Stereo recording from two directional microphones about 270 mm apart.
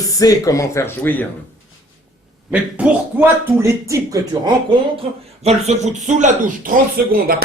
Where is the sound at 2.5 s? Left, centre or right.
Centre.